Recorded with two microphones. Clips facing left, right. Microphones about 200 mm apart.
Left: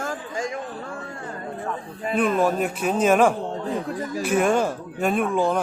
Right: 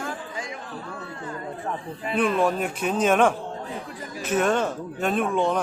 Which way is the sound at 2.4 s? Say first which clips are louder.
Left 2 dB; 5° left (ahead or behind).